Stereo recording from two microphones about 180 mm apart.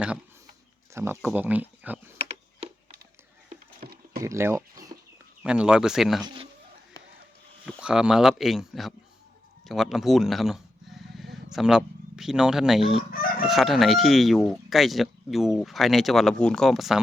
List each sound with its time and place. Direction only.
0.9 s speech: 15° right (ahead or behind)
4.2 s speech: 15° right (ahead or behind)
5.4 s speech: 5° right (ahead or behind)
6.2 s speech: 30° right (ahead or behind)
7.6 s speech: 5° right (ahead or behind)
9.6 s bleat: centre (ahead or behind)
11.5 s speech: 5° right (ahead or behind)